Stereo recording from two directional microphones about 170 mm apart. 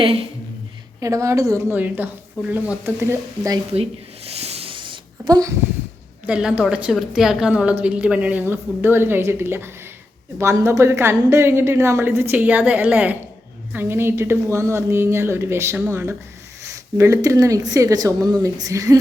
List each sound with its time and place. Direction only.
0.0 s speech: 35° right (ahead or behind)
0.9 s a woman's voice: 20° right (ahead or behind)
3.7 s a sound: 35° right (ahead or behind); by 5.5 s 20° right (ahead or behind)
6.2 s a woman's voice: 5° right (ahead or behind)